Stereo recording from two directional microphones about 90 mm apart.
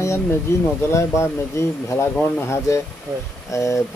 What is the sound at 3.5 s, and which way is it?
Speech, 35° left (ahead or behind).